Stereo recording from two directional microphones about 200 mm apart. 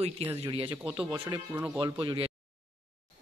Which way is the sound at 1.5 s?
10° right (ahead or behind).